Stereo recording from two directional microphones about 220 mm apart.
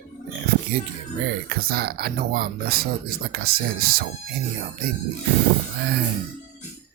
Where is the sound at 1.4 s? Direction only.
45° right (ahead or behind).